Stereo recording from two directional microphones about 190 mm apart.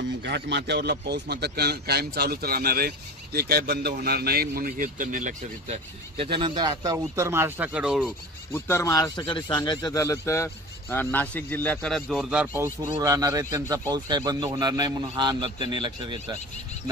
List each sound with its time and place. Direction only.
0.2 s a man's voice: 65° right (ahead or behind); by 5.8 s 40° right (ahead or behind)
6.1 s speech: 25° right (ahead or behind); by 8.1 s 5° right (ahead or behind)
8.5 s a man's voice: 15° left (ahead or behind); by 12.6 s 5° right (ahead or behind)
12.8 s speech: 15° right (ahead or behind)